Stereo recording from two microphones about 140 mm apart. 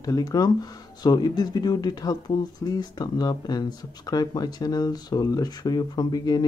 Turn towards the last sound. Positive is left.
turn(degrees=30)  # may be behind; listen again after turning